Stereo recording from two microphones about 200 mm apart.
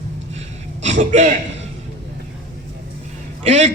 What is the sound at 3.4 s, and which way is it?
Speech, 35° right (ahead or behind).